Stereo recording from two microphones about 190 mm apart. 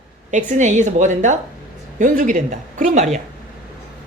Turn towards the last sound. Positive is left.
turn(degrees=-40)  # may be behind; listen again after turning